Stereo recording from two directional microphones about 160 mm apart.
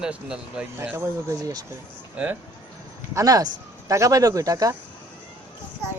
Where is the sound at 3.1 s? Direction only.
20° right (ahead or behind).